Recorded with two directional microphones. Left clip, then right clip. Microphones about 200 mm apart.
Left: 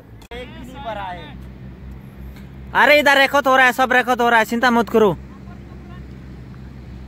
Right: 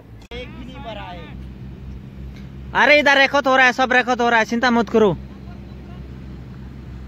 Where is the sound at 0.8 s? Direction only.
30° left (ahead or behind).